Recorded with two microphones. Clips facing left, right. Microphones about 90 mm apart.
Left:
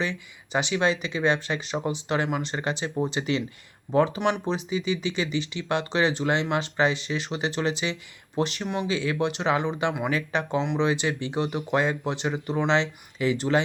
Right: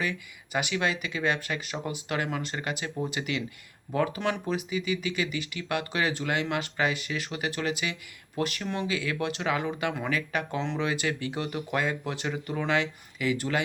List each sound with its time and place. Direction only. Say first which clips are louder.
0.0 s speech: left 2 dB; 25° left (ahead or behind)